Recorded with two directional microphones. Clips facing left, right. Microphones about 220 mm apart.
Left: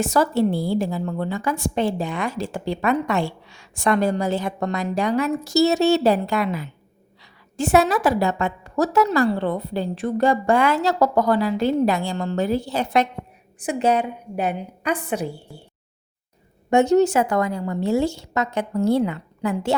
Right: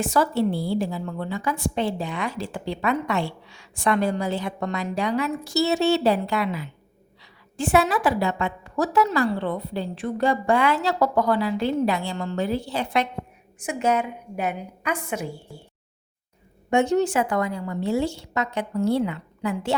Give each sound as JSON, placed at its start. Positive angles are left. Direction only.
{"t": 0.0, "sound": "a woman's voice", "side_deg": 45}
{"t": 16.6, "sound": "a woman's voice", "side_deg": 40}